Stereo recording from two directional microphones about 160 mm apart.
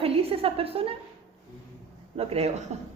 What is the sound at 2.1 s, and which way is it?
Speech, 40° right (ahead or behind).